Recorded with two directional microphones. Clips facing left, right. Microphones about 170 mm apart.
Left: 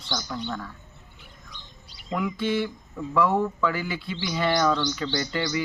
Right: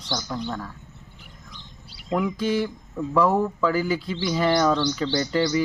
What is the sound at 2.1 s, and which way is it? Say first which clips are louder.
Speech: right 3 dB; 40° right (ahead or behind).